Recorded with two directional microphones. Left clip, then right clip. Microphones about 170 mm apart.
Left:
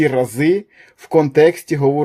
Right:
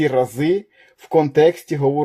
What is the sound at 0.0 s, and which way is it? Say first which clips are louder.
Speech: left 2 dB; 35° left (ahead or behind).